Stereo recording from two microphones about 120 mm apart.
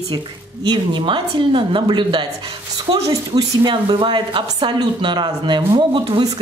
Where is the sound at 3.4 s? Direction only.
35° right (ahead or behind).